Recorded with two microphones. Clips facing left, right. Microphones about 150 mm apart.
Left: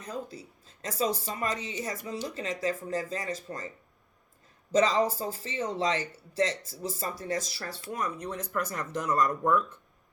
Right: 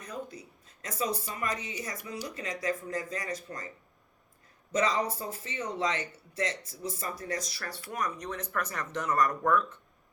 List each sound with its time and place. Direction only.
0.0 s speech: 30° left (ahead or behind)
4.7 s speech: 30° left (ahead or behind)